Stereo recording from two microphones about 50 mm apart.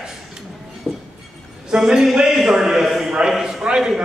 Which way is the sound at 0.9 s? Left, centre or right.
Centre.